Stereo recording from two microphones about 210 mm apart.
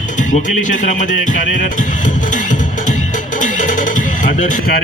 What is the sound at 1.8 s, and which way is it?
Music, 40° left (ahead or behind).